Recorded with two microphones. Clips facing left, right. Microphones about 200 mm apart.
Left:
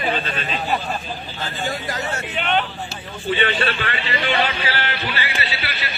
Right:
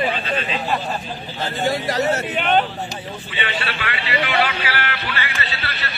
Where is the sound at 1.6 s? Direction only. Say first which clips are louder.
Right 7 dB; 40° right (ahead or behind).